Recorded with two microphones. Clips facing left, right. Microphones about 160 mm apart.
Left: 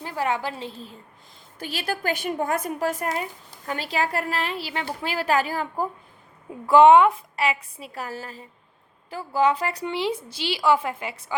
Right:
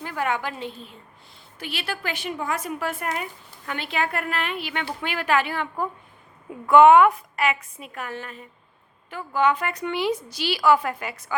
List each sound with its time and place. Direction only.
0.0 s a woman's voice: 30° left (ahead or behind)